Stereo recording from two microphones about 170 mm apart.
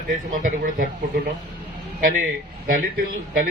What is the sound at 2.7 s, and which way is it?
Speech, 60° right (ahead or behind).